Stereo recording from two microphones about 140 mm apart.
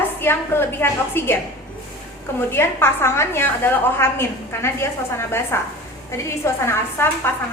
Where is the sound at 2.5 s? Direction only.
15° left (ahead or behind).